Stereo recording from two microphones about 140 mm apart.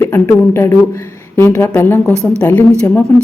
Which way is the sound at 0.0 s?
15° left (ahead or behind).